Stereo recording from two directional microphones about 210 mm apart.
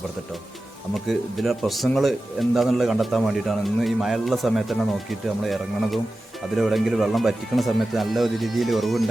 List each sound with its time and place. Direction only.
0.9 s speech: centre (ahead or behind)